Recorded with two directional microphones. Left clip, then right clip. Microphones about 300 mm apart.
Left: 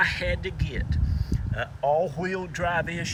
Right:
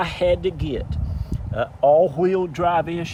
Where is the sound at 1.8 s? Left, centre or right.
Centre.